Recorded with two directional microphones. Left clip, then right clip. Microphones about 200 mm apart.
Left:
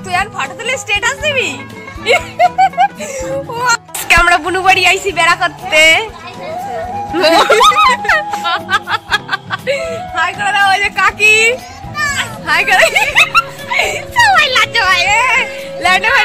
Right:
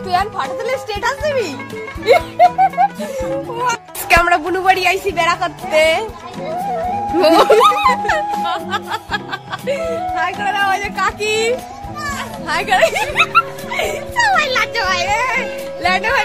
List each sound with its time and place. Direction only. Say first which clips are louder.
0.4 s speech: left 2 dB; 5° right (ahead or behind)
7.2 s speech: left 2 dB; 5° right (ahead or behind); by 11.5 s 15° left (ahead or behind)
12.0 s children playing: left 9 dB; 20° right (ahead or behind)
12.4 s speech: left 4 dB; 10° left (ahead or behind)
12.9 s speech: left 4 dB; 5° right (ahead or behind); by 16.2 s 20° left (ahead or behind)